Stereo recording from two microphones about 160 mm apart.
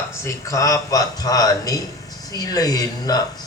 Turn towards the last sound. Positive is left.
turn(degrees=25)  # may be behind; listen again after turning